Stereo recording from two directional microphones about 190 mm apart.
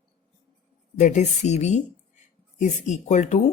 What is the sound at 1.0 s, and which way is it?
A woman's voice, 40° left (ahead or behind).